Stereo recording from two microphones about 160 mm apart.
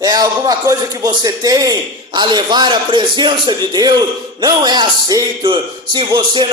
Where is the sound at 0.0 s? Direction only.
25° right (ahead or behind).